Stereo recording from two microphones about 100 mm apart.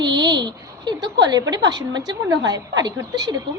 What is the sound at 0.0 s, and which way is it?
A woman's voice, 50° right (ahead or behind).